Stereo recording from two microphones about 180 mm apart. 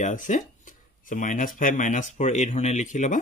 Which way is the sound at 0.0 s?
45° left (ahead or behind).